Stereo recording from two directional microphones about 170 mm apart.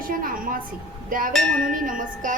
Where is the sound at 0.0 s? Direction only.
55° right (ahead or behind).